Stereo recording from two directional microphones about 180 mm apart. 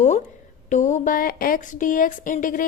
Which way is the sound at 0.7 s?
45° left (ahead or behind).